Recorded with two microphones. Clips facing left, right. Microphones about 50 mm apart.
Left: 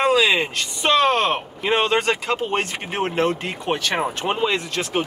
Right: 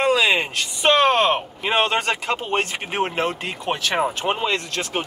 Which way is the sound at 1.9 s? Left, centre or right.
Centre.